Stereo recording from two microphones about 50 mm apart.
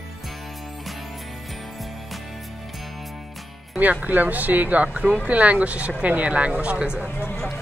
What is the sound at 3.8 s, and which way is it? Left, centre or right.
Speech, right.